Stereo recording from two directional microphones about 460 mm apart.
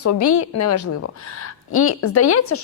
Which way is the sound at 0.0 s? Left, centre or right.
Left.